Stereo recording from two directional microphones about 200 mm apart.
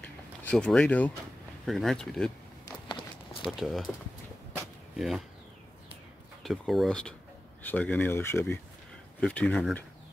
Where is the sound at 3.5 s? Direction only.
Centre (ahead or behind).